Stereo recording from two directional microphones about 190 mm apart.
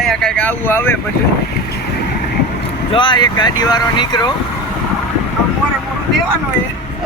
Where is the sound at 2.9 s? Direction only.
25° left (ahead or behind).